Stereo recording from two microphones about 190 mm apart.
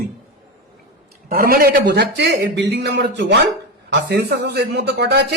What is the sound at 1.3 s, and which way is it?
Speech, 50° right (ahead or behind).